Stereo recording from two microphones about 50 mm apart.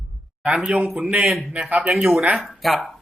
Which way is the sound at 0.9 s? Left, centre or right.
Right.